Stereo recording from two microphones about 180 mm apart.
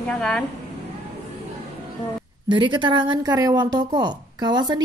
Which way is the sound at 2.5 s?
25° right (ahead or behind).